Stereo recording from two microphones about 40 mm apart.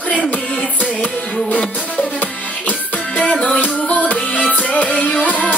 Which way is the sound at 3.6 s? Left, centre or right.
Left.